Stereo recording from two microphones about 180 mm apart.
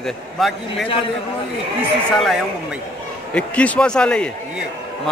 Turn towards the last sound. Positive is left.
turn(degrees=5)  # may be behind; listen again after turning